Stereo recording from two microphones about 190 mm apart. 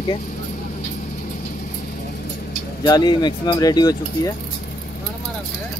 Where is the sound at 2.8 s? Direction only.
25° left (ahead or behind).